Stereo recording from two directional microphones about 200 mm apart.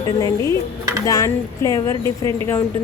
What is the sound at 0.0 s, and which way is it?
Speech, 20° left (ahead or behind).